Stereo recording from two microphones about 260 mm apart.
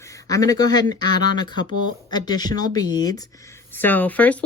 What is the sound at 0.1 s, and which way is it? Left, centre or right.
Speech, centre.